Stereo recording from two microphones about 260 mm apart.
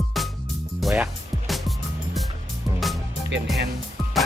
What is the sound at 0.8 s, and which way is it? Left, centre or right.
Music, centre.